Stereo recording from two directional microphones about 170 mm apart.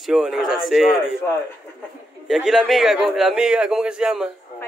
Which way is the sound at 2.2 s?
Centre (ahead or behind).